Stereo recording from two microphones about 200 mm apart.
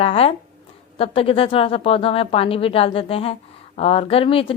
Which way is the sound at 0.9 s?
30° left (ahead or behind).